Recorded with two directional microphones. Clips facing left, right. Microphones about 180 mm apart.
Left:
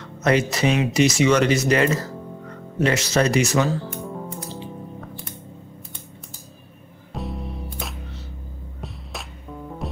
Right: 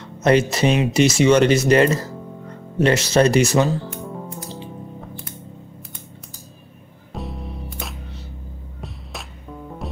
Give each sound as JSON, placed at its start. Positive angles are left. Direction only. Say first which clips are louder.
{"t": 0.2, "sound": "speech", "louder": "right 3 dB", "side_deg": -25}
{"t": 3.8, "sound": "music", "louder": "even", "side_deg": 0}
{"t": 7.1, "sound": "music", "louder": "left 1 dB", "side_deg": 0}